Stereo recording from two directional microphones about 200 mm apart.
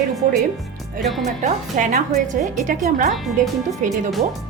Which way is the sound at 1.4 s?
40° right (ahead or behind).